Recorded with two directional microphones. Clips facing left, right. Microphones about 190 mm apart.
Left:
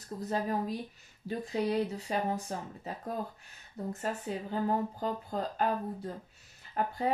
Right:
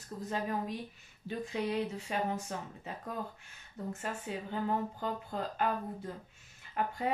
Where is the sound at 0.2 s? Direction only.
40° left (ahead or behind).